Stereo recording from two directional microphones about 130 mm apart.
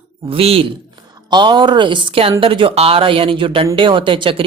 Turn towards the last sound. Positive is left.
turn(degrees=-40)  # may be behind; listen again after turning